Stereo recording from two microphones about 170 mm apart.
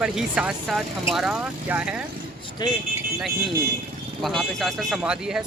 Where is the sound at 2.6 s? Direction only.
25° left (ahead or behind).